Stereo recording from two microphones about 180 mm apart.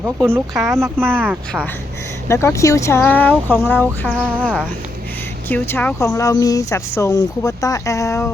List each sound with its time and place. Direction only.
0.0 s speech: 15° right (ahead or behind)
0.5 s speech: centre (ahead or behind)
0.8 s speech: 15° right (ahead or behind)
2.2 s speech: 15° left (ahead or behind)
4.2 s speech: 10° right (ahead or behind)
5.5 s speech: 10° left (ahead or behind)